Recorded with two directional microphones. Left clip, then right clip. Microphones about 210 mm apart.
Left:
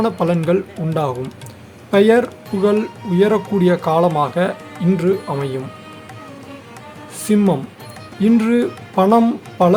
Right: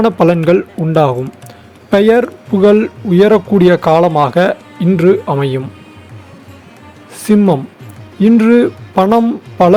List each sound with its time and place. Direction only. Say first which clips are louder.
0.0 s speech: right 8 dB; 25° right (ahead or behind)
7.3 s speech: right 6 dB; 20° right (ahead or behind)